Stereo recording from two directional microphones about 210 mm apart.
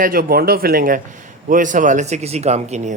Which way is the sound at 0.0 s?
45° right (ahead or behind).